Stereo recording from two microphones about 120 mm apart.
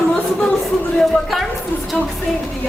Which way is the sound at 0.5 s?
5° left (ahead or behind).